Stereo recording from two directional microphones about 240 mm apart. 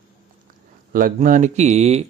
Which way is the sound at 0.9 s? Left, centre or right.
Right.